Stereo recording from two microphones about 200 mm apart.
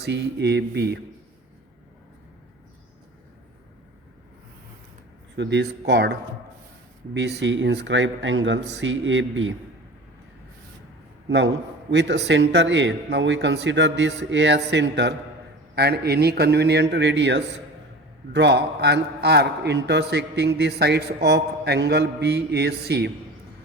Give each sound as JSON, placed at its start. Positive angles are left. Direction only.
{"t": 0.0, "sound": "a man's voice", "side_deg": -60}
{"t": 5.4, "sound": "a man's voice", "side_deg": -60}
{"t": 11.3, "sound": "a man's voice", "side_deg": -65}